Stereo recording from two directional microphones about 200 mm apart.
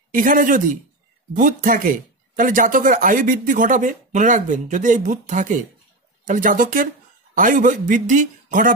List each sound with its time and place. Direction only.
0.1 s speech: 40° right (ahead or behind)